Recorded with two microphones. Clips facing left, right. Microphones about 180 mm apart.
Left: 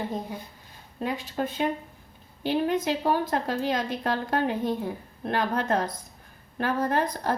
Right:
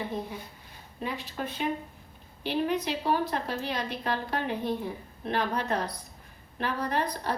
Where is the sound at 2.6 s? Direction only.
45° left (ahead or behind).